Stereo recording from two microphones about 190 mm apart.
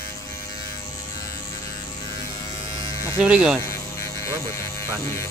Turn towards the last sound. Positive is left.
turn(degrees=15)  # may be behind; listen again after turning